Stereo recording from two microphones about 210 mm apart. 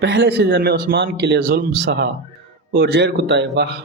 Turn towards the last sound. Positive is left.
turn(degrees=-55)  # may be behind; listen again after turning